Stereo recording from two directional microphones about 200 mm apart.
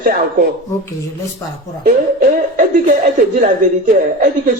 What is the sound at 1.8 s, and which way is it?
Music, 40° right (ahead or behind).